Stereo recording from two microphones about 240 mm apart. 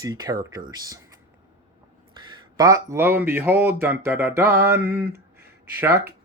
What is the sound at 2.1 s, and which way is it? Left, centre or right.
Speech, centre.